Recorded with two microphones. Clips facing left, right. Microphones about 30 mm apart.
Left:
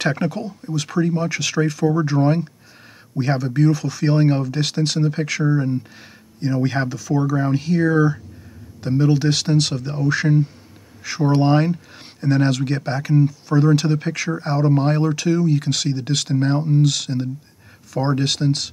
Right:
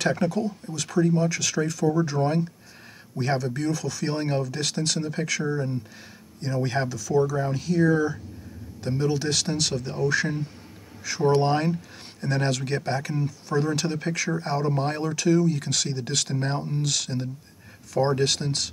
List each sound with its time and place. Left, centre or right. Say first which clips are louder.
0.0 s speech: left 2 dB; left